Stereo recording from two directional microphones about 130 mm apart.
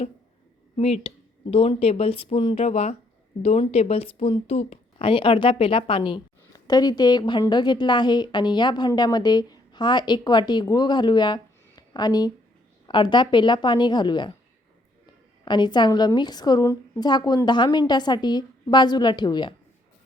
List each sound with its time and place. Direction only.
0.8 s speech: 50° left (ahead or behind)
2.6 s a woman's voice: 55° left (ahead or behind); by 14.3 s 35° left (ahead or behind)
15.4 s a woman's voice: 35° left (ahead or behind)